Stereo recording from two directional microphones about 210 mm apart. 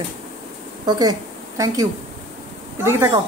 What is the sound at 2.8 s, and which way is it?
Speech, 15° right (ahead or behind).